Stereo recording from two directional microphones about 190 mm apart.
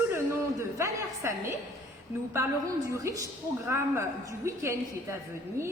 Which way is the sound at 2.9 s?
15° right (ahead or behind).